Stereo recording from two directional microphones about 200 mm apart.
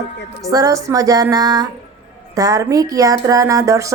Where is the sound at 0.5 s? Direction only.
15° right (ahead or behind).